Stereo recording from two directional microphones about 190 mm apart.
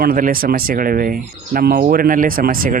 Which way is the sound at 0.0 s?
50° right (ahead or behind).